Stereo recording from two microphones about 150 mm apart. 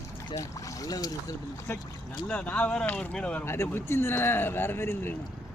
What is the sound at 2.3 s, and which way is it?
A man's voice, 10° left (ahead or behind).